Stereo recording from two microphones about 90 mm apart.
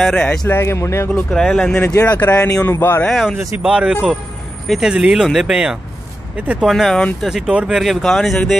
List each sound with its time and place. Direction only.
0.0 s speech: 10° left (ahead or behind)
0.5 s a man's voice: 30° left (ahead or behind)
1.3 s a man's voice: 5° left (ahead or behind); by 3.0 s 30° left (ahead or behind)
3.1 s speech: centre (ahead or behind)
3.6 s speech: 10° right (ahead or behind)
6.7 s speech: 5° left (ahead or behind)